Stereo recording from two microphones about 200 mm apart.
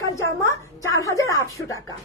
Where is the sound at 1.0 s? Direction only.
15° left (ahead or behind).